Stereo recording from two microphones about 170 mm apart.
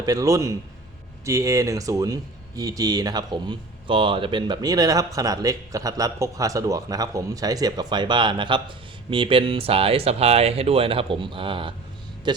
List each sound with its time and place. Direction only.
0.0 s speech: 20° right (ahead or behind)